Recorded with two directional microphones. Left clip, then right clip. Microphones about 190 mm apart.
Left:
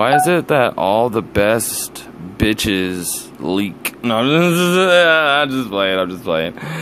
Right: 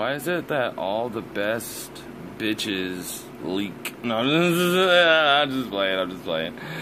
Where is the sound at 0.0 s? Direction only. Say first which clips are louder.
Left 13 dB; 40° left (ahead or behind).